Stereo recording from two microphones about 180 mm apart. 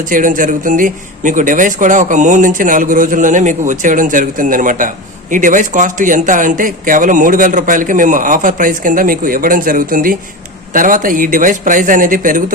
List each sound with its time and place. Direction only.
0.1 s speech: 45° right (ahead or behind)